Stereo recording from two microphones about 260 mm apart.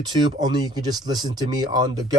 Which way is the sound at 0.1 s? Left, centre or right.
Centre.